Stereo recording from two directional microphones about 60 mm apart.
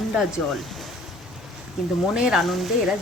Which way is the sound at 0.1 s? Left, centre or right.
Centre.